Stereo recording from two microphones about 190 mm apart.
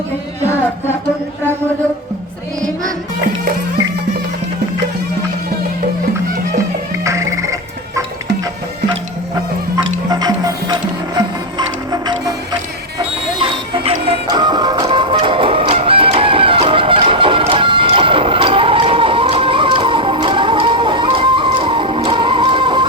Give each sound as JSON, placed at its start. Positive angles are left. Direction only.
{"t": 7.0, "sound": "music", "side_deg": -15}
{"t": 9.8, "sound": "music", "side_deg": -20}
{"t": 13.4, "sound": "music", "side_deg": -30}